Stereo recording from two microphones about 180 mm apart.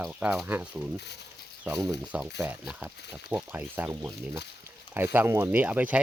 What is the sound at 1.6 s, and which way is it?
Speech, 20° right (ahead or behind).